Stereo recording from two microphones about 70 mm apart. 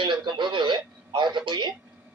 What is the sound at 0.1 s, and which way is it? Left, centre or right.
Speech, right.